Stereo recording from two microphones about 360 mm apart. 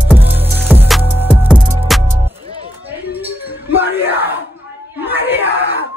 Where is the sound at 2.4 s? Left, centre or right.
Centre.